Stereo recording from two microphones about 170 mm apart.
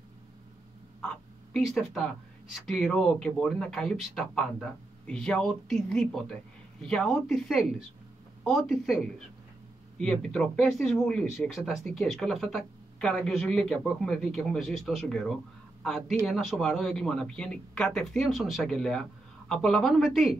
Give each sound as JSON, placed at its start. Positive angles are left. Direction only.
{"t": 1.0, "sound": "speech", "side_deg": 0}